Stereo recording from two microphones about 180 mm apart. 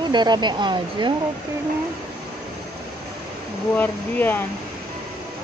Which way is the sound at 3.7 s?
10° left (ahead or behind).